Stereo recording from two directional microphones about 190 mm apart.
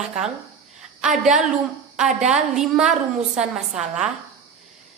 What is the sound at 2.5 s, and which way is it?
A woman's voice, 5° right (ahead or behind).